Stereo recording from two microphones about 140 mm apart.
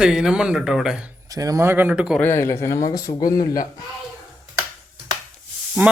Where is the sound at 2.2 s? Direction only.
20° left (ahead or behind).